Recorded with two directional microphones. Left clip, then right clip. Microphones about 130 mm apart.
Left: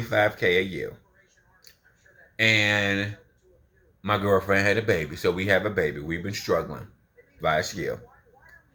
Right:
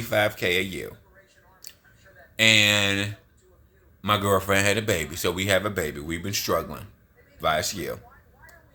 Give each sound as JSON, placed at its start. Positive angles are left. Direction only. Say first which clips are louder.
{"t": 0.1, "sound": "speech", "louder": "left 1 dB", "side_deg": -35}
{"t": 2.3, "sound": "speech", "louder": "right 3 dB", "side_deg": -40}